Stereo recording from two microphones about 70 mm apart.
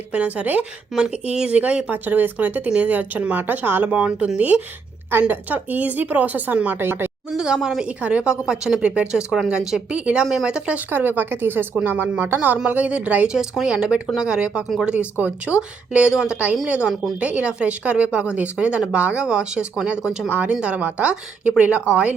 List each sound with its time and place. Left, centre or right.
0.1 s speech: centre
0.9 s speech: centre; by 3.8 s right
3.8 s speech: centre
5.3 s speech: right
7.3 s speech: centre
10.9 s speech: right
13.3 s speech: centre